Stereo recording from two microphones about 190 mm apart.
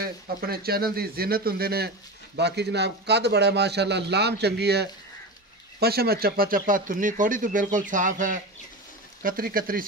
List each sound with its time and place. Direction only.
0.0 s a man's voice: 55° right (ahead or behind)